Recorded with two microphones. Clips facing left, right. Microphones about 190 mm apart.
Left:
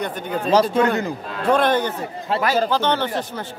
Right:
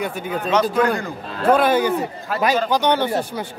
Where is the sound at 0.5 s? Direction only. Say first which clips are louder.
Left 1 dB; 30° left (ahead or behind).